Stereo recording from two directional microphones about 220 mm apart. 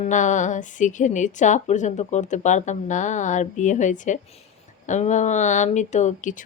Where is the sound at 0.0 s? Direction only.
35° left (ahead or behind).